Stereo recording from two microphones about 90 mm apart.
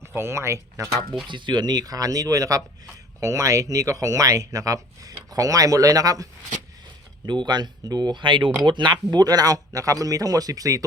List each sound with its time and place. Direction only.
0.0 s speech: 30° right (ahead or behind)
1.3 s speech: 60° right (ahead or behind); by 6.2 s 40° right (ahead or behind)
7.3 s speech: 55° right (ahead or behind)
9.0 s speech: 45° right (ahead or behind)